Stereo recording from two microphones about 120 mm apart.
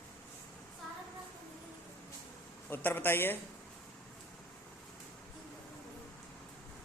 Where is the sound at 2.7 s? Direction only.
15° left (ahead or behind).